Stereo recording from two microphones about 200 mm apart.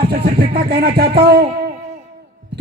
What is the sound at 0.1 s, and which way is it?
Speech, 50° right (ahead or behind).